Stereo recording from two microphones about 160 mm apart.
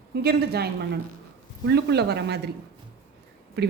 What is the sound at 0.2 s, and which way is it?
A woman's voice, 85° right.